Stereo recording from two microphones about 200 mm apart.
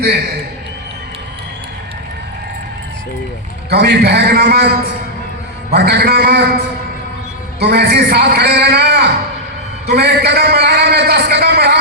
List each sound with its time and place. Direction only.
3.7 s a man's voice: 55° right (ahead or behind)
5.7 s a man's voice: 55° right (ahead or behind)
7.6 s a man's voice: 55° right (ahead or behind)